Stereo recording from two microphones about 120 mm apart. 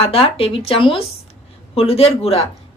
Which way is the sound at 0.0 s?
55° left (ahead or behind).